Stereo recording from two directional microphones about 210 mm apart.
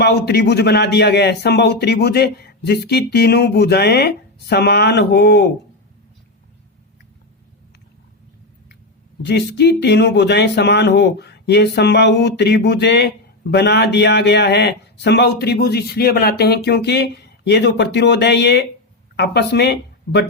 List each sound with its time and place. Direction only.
0.0 s speech: 50° left (ahead or behind)
9.2 s speech: 55° left (ahead or behind)